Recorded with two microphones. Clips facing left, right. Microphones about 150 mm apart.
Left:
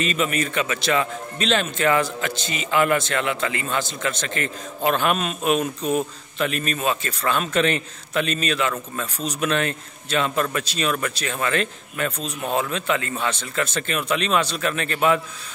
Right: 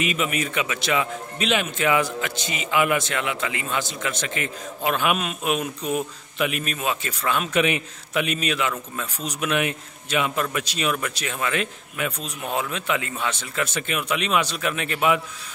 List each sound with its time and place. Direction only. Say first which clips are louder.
0.0 s a man's voice: left 2 dB; 10° right (ahead or behind)
5.8 s speech: left 3 dB; 30° left (ahead or behind)
6.3 s a man's voice: left 1 dB; 10° right (ahead or behind)